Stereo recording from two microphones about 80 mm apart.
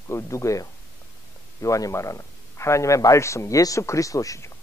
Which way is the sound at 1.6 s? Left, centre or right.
Left.